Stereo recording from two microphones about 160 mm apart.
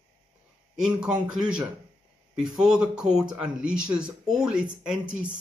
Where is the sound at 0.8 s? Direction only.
5° right (ahead or behind).